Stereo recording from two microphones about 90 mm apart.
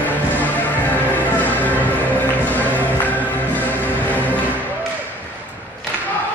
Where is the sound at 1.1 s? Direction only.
20° left (ahead or behind).